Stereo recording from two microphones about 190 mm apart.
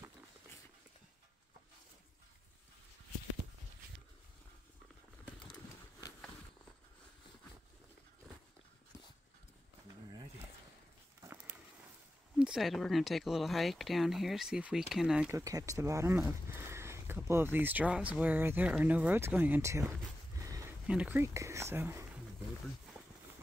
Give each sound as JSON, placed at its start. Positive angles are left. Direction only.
{"t": 12.4, "sound": "speech", "side_deg": -5}
{"t": 15.3, "sound": "speech", "side_deg": -15}
{"t": 20.3, "sound": "a sound", "side_deg": -15}
{"t": 20.8, "sound": "speech", "side_deg": -5}